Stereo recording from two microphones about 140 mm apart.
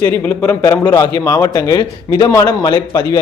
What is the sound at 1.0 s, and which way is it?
A man's voice, 30° left (ahead or behind).